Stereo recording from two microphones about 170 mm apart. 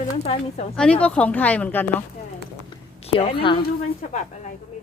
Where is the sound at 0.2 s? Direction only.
40° left (ahead or behind).